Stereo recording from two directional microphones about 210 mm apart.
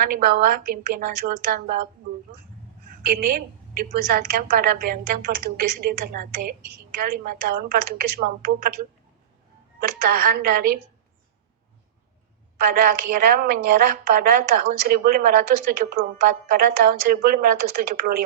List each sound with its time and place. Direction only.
0.0 s a woman's voice: 45° right (ahead or behind)
3.0 s a woman's voice: 45° right (ahead or behind)
10.0 s a woman's voice: 45° right (ahead or behind)
12.7 s a woman's voice: 45° right (ahead or behind)